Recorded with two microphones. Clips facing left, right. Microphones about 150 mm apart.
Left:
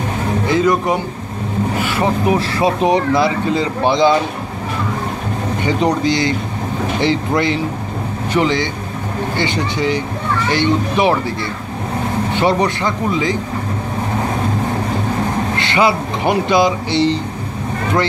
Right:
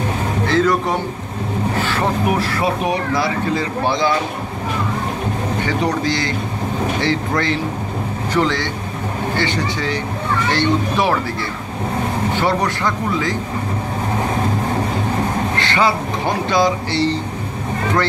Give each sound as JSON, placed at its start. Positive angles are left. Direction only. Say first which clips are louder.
{"t": 0.5, "sound": "music", "louder": "left 2 dB", "side_deg": 15}
{"t": 2.6, "sound": "speech", "louder": "left 5 dB", "side_deg": 20}
{"t": 5.7, "sound": "speech", "louder": "left 5 dB", "side_deg": 15}
{"t": 12.4, "sound": "speech", "louder": "left 5 dB", "side_deg": 20}
{"t": 15.6, "sound": "speech", "louder": "left 3 dB", "side_deg": 15}